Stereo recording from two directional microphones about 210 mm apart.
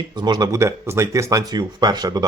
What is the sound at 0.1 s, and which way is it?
A man's voice, 20° right (ahead or behind).